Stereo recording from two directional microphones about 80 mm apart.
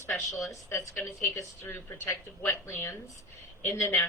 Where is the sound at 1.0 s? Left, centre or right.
Left.